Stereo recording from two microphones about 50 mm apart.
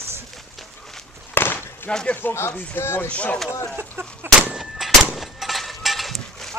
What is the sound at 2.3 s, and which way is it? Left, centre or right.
Speech, left.